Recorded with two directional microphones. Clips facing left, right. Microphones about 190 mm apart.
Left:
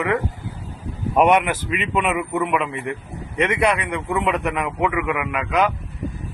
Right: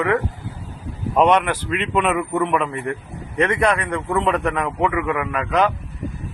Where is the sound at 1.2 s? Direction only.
10° left (ahead or behind).